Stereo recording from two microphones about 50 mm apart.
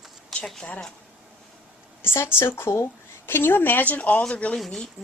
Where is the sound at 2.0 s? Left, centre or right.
Left.